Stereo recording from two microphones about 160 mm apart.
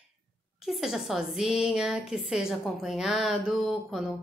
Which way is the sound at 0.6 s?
Centre (ahead or behind).